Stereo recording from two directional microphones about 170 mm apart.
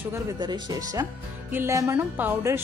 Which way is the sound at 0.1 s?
20° right (ahead or behind).